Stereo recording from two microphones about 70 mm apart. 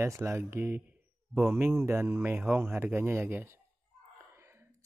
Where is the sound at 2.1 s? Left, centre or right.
Right.